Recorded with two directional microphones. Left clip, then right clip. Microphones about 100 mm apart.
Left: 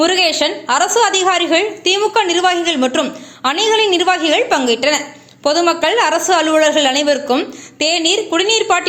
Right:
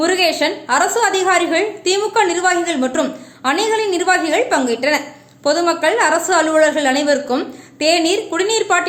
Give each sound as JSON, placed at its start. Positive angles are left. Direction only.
{"t": 0.0, "sound": "a woman's voice", "side_deg": 30}